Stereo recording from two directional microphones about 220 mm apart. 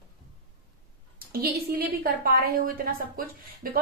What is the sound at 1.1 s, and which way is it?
A woman's voice, 45° right (ahead or behind).